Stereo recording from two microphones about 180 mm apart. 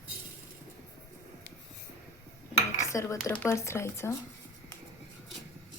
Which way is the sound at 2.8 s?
15° left (ahead or behind).